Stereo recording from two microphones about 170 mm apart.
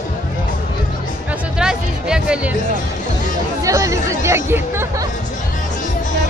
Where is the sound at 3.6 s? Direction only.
20° right (ahead or behind).